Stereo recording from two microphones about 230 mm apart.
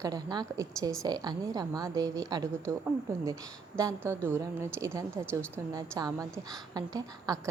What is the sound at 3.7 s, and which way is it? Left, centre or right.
A woman's voice, centre.